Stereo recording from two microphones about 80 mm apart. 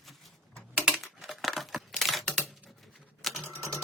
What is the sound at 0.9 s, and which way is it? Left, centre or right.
Typing, centre.